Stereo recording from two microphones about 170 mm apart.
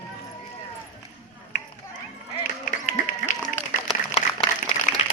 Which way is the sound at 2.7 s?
50° left (ahead or behind).